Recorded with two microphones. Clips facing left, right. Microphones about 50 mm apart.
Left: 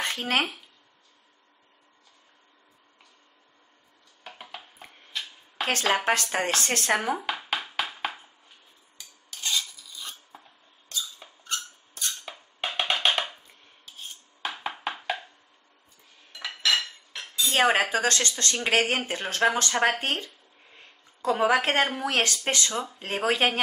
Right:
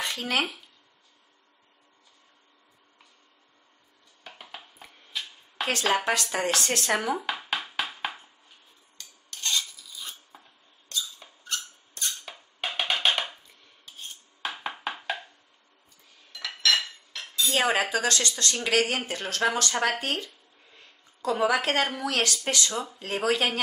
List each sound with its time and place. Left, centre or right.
0.0 s speech: left
4.2 s a sound: centre
5.7 s speech: left
7.2 s a sound: centre
8.9 s cutlery: centre
10.9 s a sound: centre
13.8 s dishes: centre
16.3 s cutlery: centre
17.5 s dishes: left
18.4 s speech: left
20.7 s a sound: left
21.8 s speech: left